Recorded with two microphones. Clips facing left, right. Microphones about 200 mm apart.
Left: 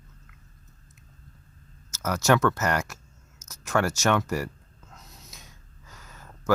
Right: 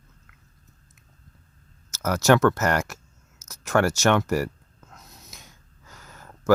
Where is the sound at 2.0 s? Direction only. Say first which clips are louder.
Right 4 dB; 60° right (ahead or behind).